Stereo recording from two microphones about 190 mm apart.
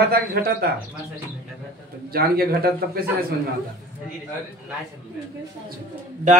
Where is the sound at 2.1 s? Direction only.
55° right (ahead or behind).